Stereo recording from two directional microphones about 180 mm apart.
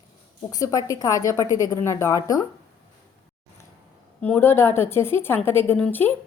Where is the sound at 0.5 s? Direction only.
20° left (ahead or behind).